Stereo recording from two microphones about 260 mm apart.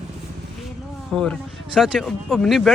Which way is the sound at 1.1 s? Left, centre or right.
Centre.